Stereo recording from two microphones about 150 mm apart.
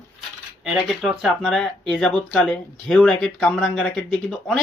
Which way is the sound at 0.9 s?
Centre (ahead or behind).